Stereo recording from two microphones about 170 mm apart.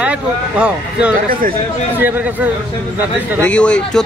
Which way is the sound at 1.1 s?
55° right (ahead or behind).